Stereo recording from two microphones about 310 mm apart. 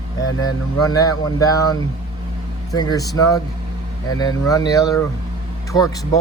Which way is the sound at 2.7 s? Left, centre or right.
Centre.